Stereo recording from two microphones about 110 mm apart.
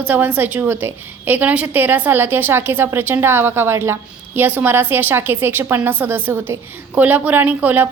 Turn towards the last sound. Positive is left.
turn(degrees=-15)  # may be behind; listen again after turning